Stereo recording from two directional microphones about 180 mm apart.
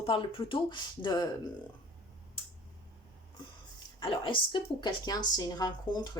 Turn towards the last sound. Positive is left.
turn(degrees=20)  # may be behind; listen again after turning